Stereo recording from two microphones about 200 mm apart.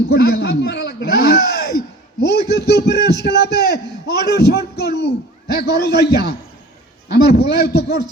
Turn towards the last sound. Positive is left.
turn(degrees=50)  # may be behind; listen again after turning